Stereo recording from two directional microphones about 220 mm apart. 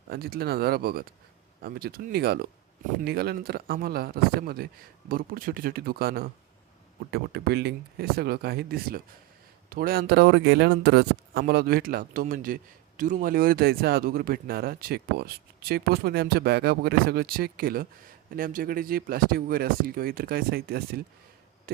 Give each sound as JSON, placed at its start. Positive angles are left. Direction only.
{"t": 0.1, "sound": "speech", "side_deg": -45}